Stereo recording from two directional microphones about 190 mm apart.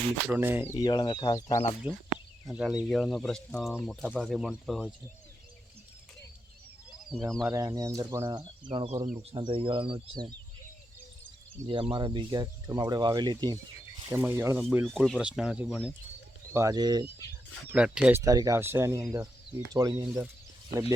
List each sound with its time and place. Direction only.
0.3 s speech: 10° right (ahead or behind)
0.8 s speech: 25° left (ahead or behind)
2.5 s speech: centre (ahead or behind)
7.1 s speech: centre (ahead or behind)
7.4 s speech: 15° right (ahead or behind)
8.7 s speech: 30° right (ahead or behind)
11.6 s speech: 25° right (ahead or behind)
17.7 s speech: 5° right (ahead or behind)
18.2 s speech: 15° right (ahead or behind)